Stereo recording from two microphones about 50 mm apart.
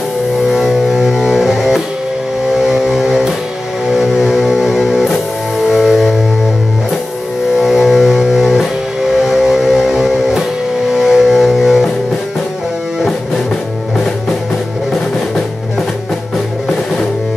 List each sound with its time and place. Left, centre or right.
0.5 s music: centre
2.5 s a sound: centre
3.9 s music: centre
7.6 s music: centre